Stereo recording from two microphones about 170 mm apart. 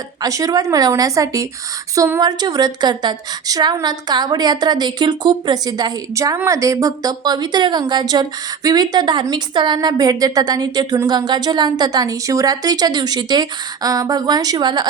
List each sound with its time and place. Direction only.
0.2 s a woman's voice: 20° right (ahead or behind)